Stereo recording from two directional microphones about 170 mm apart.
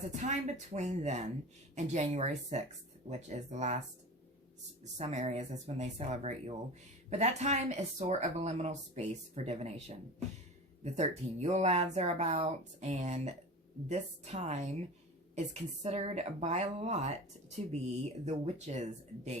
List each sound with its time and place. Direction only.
0.2 s a woman's voice: 45° right (ahead or behind)
4.8 s speech: 40° right (ahead or behind)
10.8 s speech: 40° right (ahead or behind)